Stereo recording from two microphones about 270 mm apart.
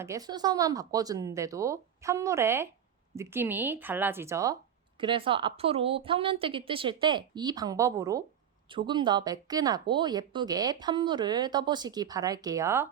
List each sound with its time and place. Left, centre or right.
0.0 s a woman's voice: centre